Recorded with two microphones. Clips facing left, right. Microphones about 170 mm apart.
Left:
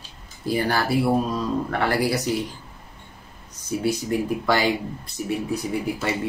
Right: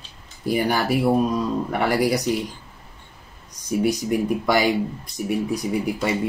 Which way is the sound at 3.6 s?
15° right (ahead or behind).